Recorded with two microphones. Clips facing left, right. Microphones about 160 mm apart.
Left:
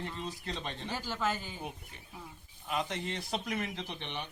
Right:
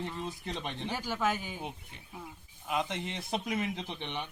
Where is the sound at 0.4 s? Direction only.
20° right (ahead or behind).